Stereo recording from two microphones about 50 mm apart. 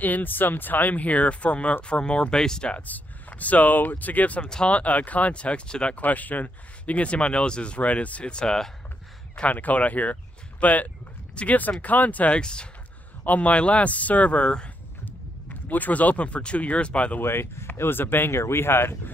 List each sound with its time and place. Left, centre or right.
0.0 s speech: left; by 2.7 s centre
2.7 s speech: left
4.5 s speech: centre
5.9 s speech: left; by 8.7 s centre
9.5 s speech: left
12.4 s speech: centre
13.2 s speech: left
15.7 s speech: left
17.2 s speech: left